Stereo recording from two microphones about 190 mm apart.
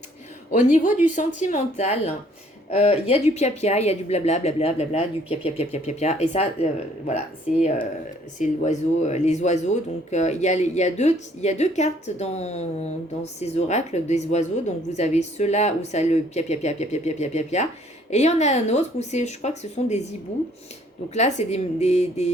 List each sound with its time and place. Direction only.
0.5 s speech: 40° left (ahead or behind)
0.9 s speech: 10° right (ahead or behind)
1.1 s speech: 40° left (ahead or behind)
21.1 s speech: 35° left (ahead or behind)